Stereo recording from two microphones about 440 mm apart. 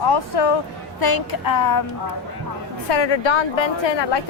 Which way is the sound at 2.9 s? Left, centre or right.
Left.